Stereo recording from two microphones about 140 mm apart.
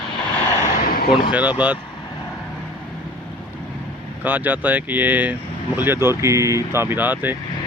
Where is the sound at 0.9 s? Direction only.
90° left.